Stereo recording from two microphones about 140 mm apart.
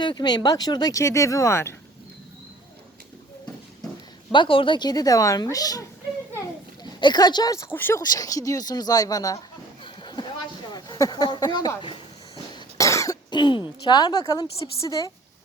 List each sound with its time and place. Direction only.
0.0 s speech: 30° left (ahead or behind)
4.3 s speech: 35° left (ahead or behind)
6.8 s speech: 30° left (ahead or behind)
8.0 s speech: 25° left (ahead or behind)
9.8 s a sound: 35° left (ahead or behind)
12.5 s cough: 25° left (ahead or behind)
13.8 s speech: 30° left (ahead or behind)